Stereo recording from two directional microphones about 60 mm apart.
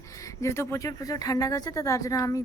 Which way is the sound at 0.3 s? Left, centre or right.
Left.